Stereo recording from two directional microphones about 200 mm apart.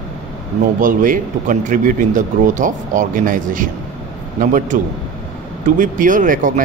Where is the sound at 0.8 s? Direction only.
40° right (ahead or behind).